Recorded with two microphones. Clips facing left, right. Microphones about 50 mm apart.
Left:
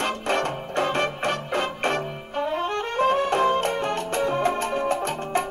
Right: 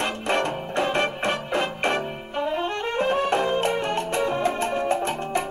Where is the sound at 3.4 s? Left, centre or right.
Right.